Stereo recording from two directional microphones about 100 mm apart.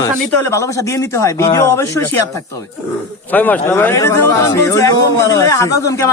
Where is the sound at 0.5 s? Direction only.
30° left (ahead or behind).